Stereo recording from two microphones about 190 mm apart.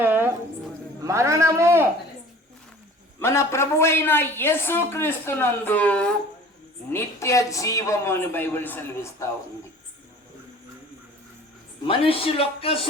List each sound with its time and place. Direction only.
0.0 s a sound: 10° right (ahead or behind)
1.0 s a man's voice: 15° right (ahead or behind)
3.2 s a woman's voice: 15° left (ahead or behind)
11.9 s a man's voice: 30° left (ahead or behind)